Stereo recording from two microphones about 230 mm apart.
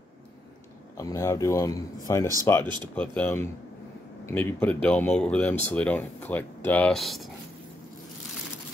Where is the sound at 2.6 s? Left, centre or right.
Centre.